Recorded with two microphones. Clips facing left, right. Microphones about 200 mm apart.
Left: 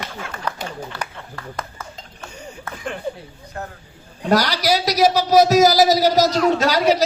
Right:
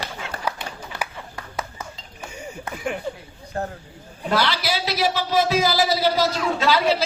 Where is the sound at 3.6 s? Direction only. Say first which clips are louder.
Right 4 dB; 35° right (ahead or behind).